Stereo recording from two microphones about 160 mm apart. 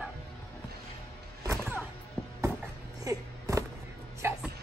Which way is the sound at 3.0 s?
20° right (ahead or behind).